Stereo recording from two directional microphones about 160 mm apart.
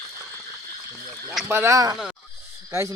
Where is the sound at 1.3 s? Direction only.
10° right (ahead or behind).